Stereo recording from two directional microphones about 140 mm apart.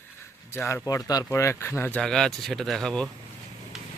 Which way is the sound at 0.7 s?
25° left (ahead or behind).